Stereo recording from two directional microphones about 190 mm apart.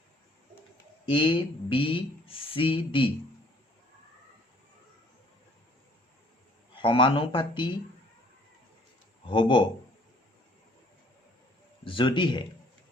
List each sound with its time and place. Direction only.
1.0 s speech: 25° left (ahead or behind)
6.7 s speech: 25° left (ahead or behind)
9.3 s speech: 25° left (ahead or behind)
11.9 s speech: 25° left (ahead or behind)